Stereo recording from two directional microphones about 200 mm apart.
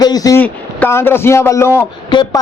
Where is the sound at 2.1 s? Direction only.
25° left (ahead or behind).